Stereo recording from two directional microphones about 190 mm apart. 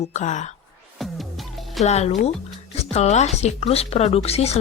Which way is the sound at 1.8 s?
35° left (ahead or behind).